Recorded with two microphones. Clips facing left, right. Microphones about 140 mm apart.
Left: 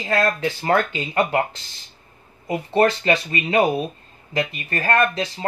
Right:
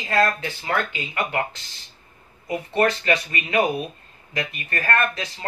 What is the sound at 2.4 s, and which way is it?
Speech, 25° left (ahead or behind).